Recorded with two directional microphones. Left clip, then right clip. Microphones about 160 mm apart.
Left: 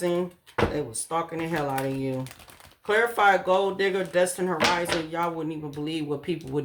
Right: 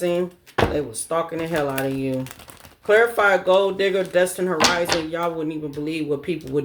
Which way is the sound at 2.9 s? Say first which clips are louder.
Right 4 dB; 30° left (ahead or behind).